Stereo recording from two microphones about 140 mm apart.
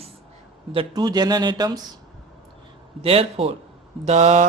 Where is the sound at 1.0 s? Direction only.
30° right (ahead or behind).